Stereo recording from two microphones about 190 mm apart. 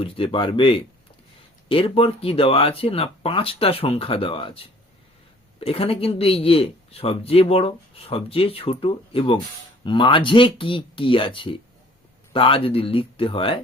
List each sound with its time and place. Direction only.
0.0 s a man's voice: 25° left (ahead or behind)